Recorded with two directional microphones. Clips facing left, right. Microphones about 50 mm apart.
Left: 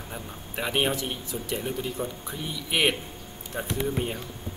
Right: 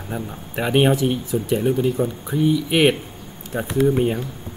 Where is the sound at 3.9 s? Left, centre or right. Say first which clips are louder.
Right 10 dB; centre.